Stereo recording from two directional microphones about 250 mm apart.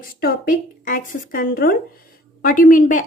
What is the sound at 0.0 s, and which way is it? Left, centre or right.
A woman's voice, left.